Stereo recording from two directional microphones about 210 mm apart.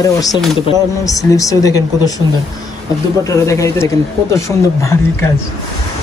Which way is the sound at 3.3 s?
15° left (ahead or behind).